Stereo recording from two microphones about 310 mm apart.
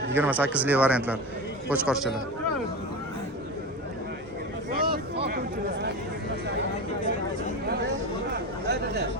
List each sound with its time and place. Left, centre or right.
0.1 s a man's voice: centre
4.8 s a sound: right
8.7 s chatter: right